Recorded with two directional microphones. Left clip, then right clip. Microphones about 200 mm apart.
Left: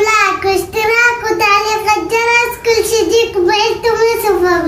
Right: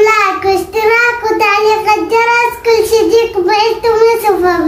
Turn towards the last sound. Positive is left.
turn(degrees=-15)  # may be behind; listen again after turning